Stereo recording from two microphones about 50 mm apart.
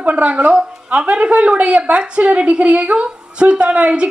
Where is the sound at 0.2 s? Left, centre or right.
Right.